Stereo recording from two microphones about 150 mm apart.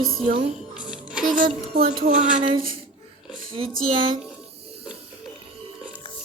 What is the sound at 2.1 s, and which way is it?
Speech, 55° right (ahead or behind).